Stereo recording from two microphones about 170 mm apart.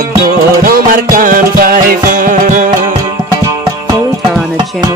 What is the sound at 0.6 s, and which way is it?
Music, 55° right (ahead or behind).